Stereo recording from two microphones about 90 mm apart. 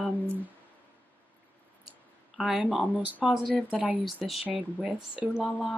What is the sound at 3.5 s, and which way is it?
Speech, centre (ahead or behind).